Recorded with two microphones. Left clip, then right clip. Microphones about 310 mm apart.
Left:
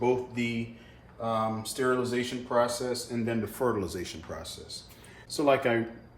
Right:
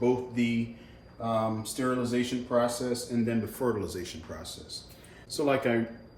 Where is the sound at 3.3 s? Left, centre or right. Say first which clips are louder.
Left 3 dB; centre.